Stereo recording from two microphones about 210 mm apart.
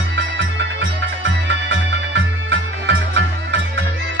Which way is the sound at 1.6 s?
60° right (ahead or behind).